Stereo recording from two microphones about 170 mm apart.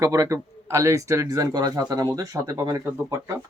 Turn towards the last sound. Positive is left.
turn(degrees=-15)  # may be behind; listen again after turning